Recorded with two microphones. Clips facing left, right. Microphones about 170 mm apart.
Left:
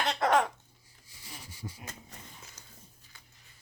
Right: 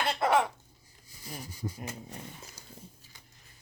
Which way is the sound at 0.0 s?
5° right (ahead or behind).